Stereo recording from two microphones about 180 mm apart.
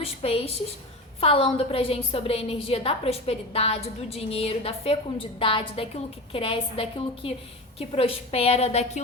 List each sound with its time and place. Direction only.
0.0 s a woman's voice: 35° left (ahead or behind)